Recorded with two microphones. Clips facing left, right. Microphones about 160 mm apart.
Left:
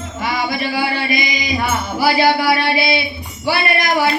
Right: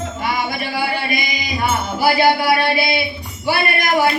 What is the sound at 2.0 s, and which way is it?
A man's voice, 50° right (ahead or behind).